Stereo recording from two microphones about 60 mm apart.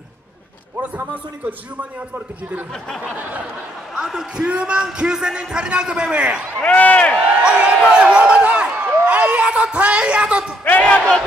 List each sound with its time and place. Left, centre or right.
0.7 s a man's voice: right
3.2 s a man's voice: right
3.9 s a man's voice: centre
6.6 s speech: left
7.2 s a sound: centre
9.0 s speech: right
10.6 s speech: left